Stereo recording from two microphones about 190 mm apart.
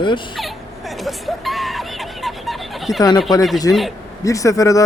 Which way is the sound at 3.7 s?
15° left (ahead or behind).